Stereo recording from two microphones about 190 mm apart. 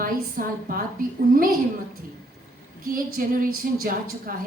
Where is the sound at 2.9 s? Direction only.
45° right (ahead or behind).